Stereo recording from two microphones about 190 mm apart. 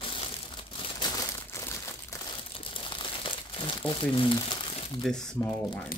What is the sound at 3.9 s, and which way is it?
Speech, 25° left (ahead or behind).